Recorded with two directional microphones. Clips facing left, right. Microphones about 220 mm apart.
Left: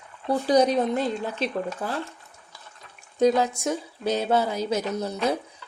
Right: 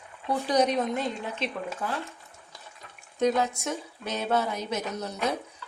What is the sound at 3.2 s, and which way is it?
A woman's voice, 30° left (ahead or behind).